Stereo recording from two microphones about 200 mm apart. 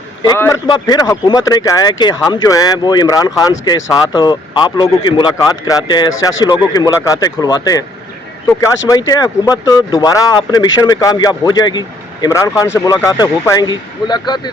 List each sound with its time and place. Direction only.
0.2 s a man's voice: 15° left (ahead or behind)
8.9 s a man's voice: 20° left (ahead or behind)